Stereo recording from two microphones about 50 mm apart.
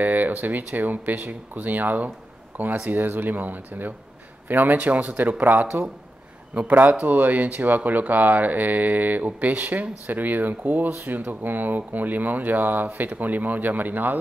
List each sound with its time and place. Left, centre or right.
0.0 s speech: right